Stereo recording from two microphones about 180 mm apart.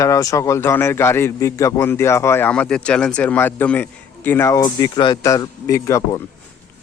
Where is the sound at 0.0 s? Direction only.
20° left (ahead or behind).